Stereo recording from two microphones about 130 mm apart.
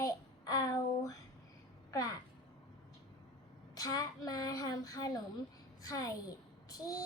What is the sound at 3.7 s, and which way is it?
Child singing, 30° left (ahead or behind).